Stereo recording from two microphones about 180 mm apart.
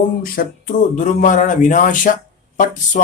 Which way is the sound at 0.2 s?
50° left (ahead or behind).